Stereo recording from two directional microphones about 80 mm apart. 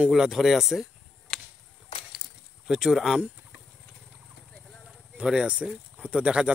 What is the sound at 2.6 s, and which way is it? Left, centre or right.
Speech, centre.